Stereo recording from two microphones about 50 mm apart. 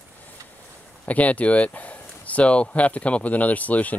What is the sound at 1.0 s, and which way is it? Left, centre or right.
Speech, left.